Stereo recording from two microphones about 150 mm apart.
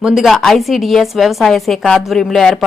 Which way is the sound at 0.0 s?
5° right (ahead or behind).